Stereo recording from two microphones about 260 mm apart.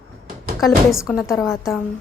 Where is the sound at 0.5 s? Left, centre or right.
Centre.